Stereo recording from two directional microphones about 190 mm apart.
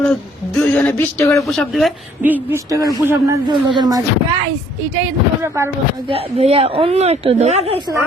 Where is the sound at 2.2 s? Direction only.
10° right (ahead or behind).